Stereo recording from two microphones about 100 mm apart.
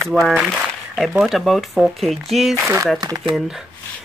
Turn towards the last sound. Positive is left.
turn(degrees=-40)  # may be behind; listen again after turning